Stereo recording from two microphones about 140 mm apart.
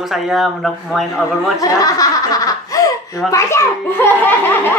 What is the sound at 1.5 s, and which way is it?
A child's voice, 25° left (ahead or behind).